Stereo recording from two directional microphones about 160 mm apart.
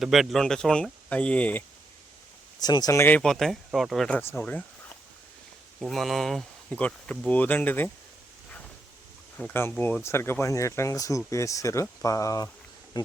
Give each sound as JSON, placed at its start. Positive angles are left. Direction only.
{"t": 0.0, "sound": "speech", "side_deg": 0}
{"t": 2.6, "sound": "speech", "side_deg": 25}
{"t": 4.2, "sound": "speech", "side_deg": 10}
{"t": 9.4, "sound": "speech", "side_deg": 15}